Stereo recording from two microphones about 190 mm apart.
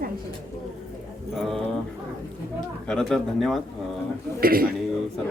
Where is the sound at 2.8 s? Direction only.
5° left (ahead or behind).